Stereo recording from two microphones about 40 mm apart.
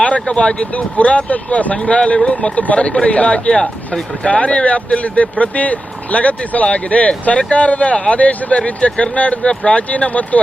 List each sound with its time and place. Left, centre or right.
0.3 s speech: left
3.6 s speech: centre
4.3 s speech: left